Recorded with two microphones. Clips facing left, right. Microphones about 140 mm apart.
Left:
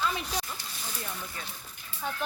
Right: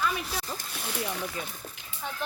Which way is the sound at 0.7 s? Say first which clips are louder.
Right 8 dB; 70° right (ahead or behind).